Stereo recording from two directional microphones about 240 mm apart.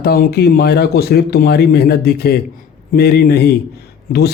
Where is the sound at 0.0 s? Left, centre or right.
Left.